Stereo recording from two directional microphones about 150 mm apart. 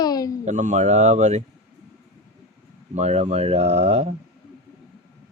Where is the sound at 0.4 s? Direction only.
50° right (ahead or behind).